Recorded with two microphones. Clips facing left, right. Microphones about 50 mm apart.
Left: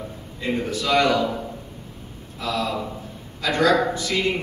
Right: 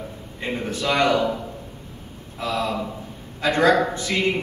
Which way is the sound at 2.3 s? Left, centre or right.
Right.